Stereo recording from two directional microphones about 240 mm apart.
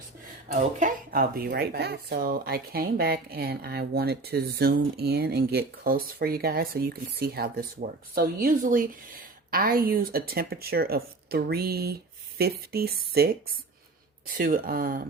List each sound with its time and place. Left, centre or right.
0.4 s speech: right